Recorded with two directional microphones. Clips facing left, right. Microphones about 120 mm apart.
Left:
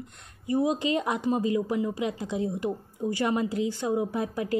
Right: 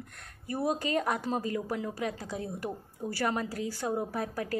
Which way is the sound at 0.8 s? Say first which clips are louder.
Left 4 dB; 20° left (ahead or behind).